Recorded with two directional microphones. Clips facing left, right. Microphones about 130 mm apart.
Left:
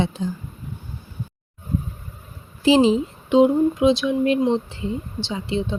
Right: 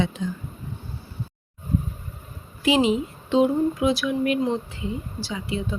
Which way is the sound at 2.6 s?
30° left (ahead or behind).